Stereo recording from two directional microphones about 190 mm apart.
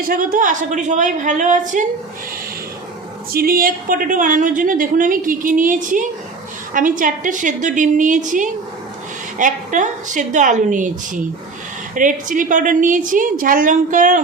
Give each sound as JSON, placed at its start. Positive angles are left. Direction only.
{"t": 0.0, "sound": "a woman's voice", "side_deg": -45}
{"t": 3.3, "sound": "a woman's voice", "side_deg": -50}